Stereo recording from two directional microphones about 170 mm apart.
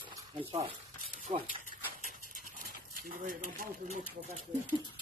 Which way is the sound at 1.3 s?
45° right (ahead or behind).